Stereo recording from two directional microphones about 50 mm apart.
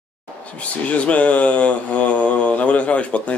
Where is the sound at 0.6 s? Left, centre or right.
Left.